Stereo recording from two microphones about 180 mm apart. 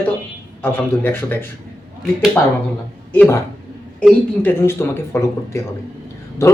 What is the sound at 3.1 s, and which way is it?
Speech, 15° left (ahead or behind).